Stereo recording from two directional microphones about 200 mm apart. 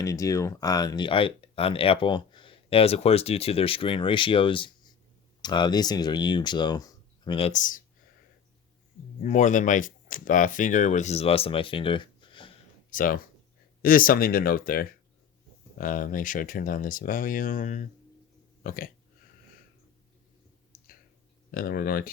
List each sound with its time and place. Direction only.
0.0 s speech: 15° left (ahead or behind); by 7.8 s 40° left (ahead or behind)
9.2 s speech: 40° left (ahead or behind)
12.9 s speech: 45° left (ahead or behind)
20.7 s a sound: 45° left (ahead or behind)
21.5 s speech: 45° left (ahead or behind)